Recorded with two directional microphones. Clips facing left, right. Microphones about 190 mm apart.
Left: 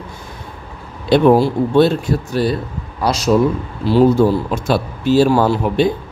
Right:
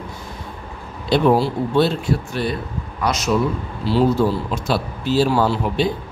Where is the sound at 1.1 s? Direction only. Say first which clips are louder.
Left 5 dB; 50° left (ahead or behind); by 3.3 s 35° left (ahead or behind).